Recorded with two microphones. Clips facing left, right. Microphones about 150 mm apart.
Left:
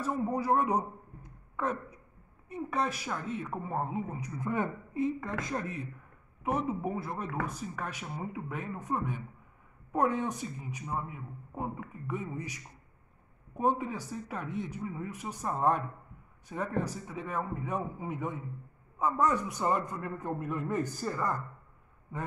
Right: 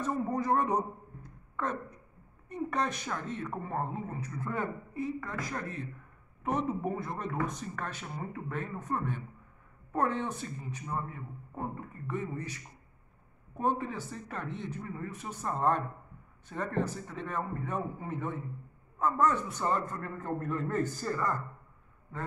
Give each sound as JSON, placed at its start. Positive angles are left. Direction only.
{"t": 0.0, "sound": "a man's voice", "side_deg": 5}
{"t": 6.4, "sound": "speech", "side_deg": 5}